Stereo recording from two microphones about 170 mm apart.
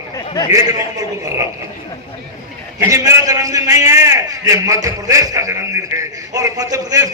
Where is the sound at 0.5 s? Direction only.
20° right (ahead or behind).